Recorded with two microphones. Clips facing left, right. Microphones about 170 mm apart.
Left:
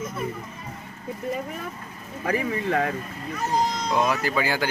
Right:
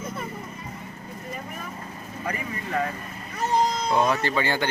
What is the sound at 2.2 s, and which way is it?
Speech, 90° left.